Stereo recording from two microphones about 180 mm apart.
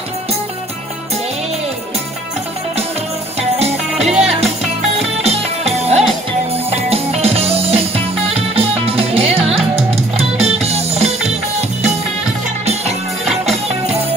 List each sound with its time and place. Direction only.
3.3 s music: 35° right (ahead or behind)
12.6 s music: 35° right (ahead or behind)